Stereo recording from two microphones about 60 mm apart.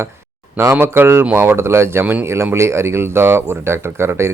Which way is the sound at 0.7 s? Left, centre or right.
Right.